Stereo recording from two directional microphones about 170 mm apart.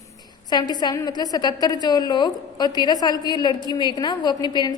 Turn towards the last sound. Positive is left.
turn(degrees=25)  # may be behind; listen again after turning